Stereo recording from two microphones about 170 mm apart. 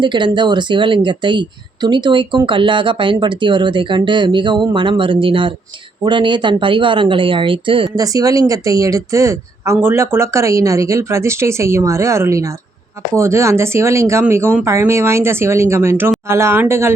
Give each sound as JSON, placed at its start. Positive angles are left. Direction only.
{"t": 0.0, "sound": "speech", "side_deg": -25}